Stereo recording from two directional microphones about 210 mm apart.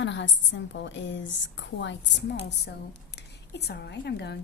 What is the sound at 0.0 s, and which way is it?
A woman's voice, 60° left (ahead or behind).